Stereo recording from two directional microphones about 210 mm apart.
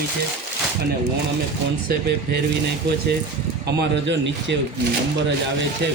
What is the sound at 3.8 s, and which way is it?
Speech, 55° right (ahead or behind).